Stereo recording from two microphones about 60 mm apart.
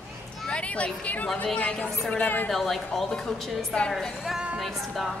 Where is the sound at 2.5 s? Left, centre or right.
Centre.